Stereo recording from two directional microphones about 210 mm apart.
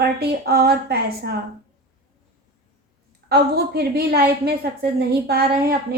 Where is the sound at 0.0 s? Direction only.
50° right (ahead or behind).